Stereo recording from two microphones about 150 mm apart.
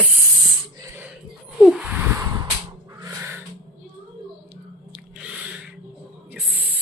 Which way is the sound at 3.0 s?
15° right (ahead or behind).